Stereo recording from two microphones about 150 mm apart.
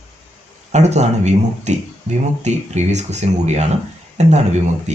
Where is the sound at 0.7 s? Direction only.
50° right (ahead or behind).